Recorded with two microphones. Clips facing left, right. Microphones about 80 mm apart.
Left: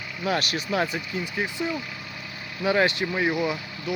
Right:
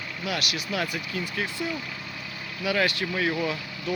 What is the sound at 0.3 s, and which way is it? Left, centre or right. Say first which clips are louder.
Speech: left 5 dB; left.